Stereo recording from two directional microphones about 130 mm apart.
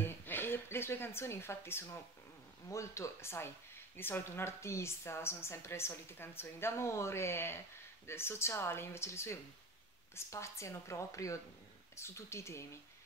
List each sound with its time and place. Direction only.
0.0 s speech: 15° left (ahead or behind)